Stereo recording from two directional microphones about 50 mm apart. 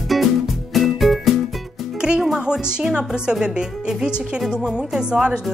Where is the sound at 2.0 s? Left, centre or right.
Centre.